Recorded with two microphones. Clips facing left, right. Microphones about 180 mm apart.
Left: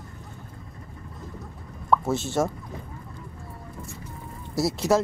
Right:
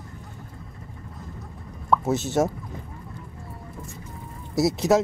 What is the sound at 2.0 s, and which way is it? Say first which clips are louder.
Speech: right 2 dB; 20° right (ahead or behind).